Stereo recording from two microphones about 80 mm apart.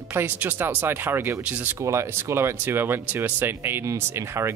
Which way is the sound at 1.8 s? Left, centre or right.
Right.